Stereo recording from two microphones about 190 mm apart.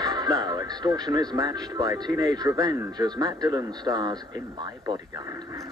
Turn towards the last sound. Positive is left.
turn(degrees=-20)  # may be behind; listen again after turning